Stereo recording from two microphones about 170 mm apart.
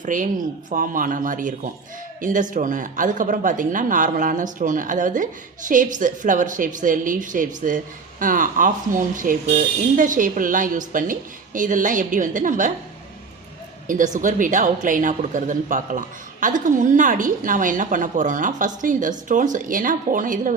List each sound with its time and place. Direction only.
0.0 s a woman's voice: 50° right (ahead or behind)
13.8 s a woman's voice: 50° right (ahead or behind)